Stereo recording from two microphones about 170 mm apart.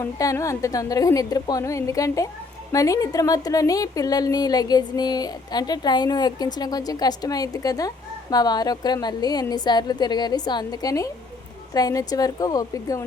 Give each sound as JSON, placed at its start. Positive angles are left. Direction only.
{"t": 0.0, "sound": "a woman's voice", "side_deg": 20}